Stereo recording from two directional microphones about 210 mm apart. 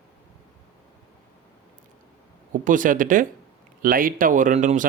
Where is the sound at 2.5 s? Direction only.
40° right (ahead or behind).